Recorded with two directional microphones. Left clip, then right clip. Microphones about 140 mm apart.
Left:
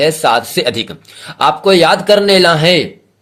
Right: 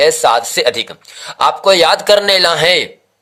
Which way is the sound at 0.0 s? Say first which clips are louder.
Right 1 dB; 35° right (ahead or behind).